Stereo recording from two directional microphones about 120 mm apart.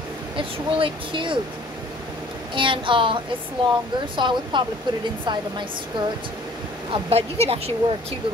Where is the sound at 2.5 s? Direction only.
45° right (ahead or behind).